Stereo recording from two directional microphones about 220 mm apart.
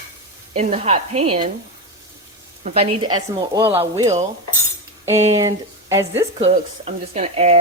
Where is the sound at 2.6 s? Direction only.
25° right (ahead or behind).